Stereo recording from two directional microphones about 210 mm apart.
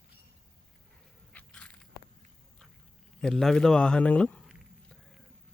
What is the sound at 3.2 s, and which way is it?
Speech, centre (ahead or behind).